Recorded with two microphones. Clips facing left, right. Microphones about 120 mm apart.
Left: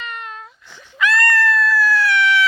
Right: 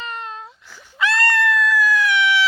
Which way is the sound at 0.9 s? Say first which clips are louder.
Left 2 dB; 30° right (ahead or behind).